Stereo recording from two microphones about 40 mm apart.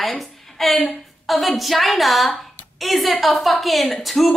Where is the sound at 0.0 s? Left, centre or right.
Centre.